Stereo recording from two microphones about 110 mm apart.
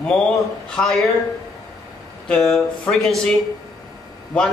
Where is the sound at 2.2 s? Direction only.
Centre (ahead or behind).